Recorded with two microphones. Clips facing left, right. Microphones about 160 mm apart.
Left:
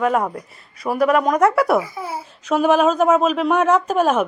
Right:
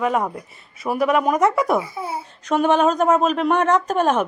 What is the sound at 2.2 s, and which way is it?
Speech, 5° left (ahead or behind).